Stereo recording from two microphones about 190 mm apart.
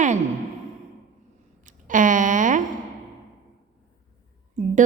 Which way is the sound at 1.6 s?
45° right (ahead or behind).